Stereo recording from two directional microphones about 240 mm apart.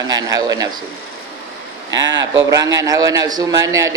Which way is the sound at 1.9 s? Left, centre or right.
Right.